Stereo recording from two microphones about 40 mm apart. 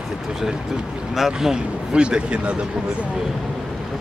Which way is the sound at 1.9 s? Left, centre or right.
Right.